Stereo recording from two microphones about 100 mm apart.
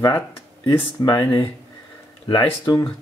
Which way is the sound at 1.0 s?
35° left (ahead or behind).